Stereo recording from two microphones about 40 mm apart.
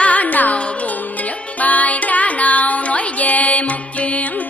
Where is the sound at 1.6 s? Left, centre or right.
Left.